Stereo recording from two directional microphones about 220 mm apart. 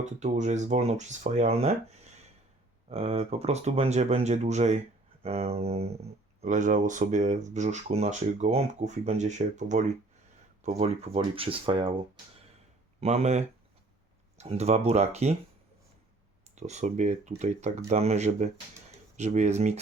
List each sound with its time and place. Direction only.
0.0 s speech: 30° right (ahead or behind)
13.0 s speech: 30° right (ahead or behind)
16.6 s speech: 30° right (ahead or behind)